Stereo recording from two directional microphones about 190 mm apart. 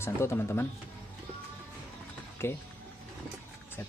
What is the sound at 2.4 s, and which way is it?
Speech, 10° left (ahead or behind).